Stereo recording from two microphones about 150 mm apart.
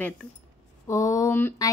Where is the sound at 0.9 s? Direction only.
20° left (ahead or behind).